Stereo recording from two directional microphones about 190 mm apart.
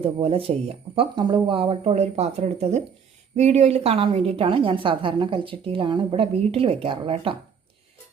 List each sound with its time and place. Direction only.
0.0 s a woman's voice: 30° right (ahead or behind)